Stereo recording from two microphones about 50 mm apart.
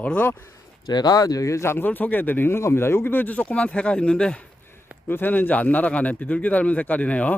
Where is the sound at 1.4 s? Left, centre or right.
Left.